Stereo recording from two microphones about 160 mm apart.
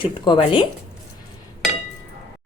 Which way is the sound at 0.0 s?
30° left (ahead or behind).